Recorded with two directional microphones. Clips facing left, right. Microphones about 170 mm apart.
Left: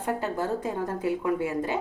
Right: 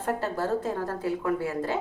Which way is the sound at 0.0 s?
15° left (ahead or behind).